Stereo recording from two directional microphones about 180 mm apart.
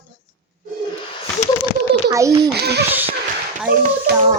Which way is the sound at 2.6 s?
65° right (ahead or behind).